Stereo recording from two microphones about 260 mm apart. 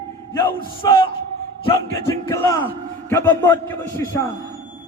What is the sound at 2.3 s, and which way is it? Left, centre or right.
A man's voice, centre.